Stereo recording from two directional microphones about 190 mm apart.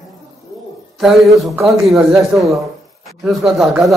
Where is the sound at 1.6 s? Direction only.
Centre (ahead or behind).